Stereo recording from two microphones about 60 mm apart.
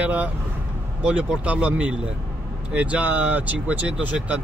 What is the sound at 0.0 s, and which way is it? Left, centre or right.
Speech, right.